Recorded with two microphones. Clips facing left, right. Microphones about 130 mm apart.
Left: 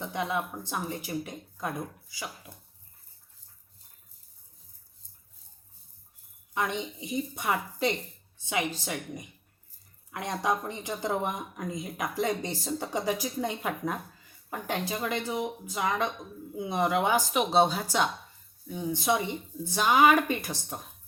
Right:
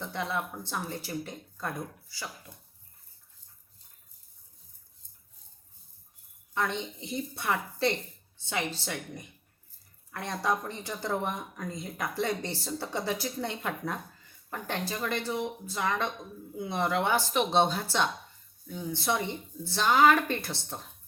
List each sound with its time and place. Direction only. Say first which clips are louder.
0.0 s speech: left 2 dB; 15° left (ahead or behind)
6.5 s speech: left 1 dB; 15° left (ahead or behind)